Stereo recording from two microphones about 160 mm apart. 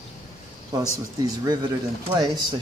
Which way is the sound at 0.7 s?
25° right (ahead or behind).